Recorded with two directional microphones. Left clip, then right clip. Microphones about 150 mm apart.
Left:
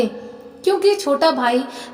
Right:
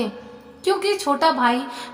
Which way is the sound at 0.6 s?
10° left (ahead or behind).